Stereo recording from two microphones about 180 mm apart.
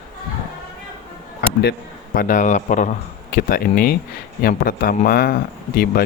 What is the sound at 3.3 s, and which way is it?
Speech, 55° left (ahead or behind).